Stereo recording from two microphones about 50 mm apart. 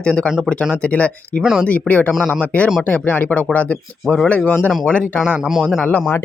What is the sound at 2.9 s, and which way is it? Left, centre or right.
Speech, left.